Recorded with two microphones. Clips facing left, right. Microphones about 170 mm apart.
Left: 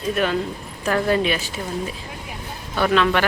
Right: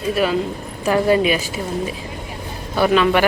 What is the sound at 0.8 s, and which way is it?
Speech, 10° right (ahead or behind).